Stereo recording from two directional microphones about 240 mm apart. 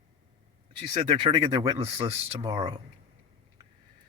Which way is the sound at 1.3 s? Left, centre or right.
Centre.